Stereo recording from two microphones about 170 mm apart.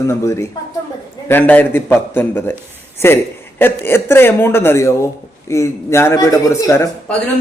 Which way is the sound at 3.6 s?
10° left (ahead or behind).